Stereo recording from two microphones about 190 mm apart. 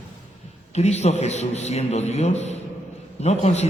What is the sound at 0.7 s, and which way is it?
A man's voice, 35° left (ahead or behind).